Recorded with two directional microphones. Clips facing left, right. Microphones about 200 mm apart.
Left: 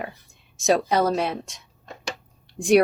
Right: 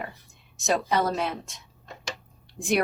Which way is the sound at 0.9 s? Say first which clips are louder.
Left 4 dB; 40° left (ahead or behind).